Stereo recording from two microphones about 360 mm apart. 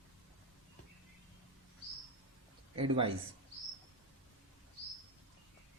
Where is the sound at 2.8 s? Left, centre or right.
Centre.